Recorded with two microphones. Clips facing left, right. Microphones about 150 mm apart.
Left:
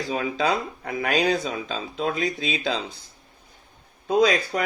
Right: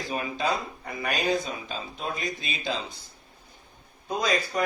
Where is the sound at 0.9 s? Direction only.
70° left (ahead or behind); by 2.8 s 90° left.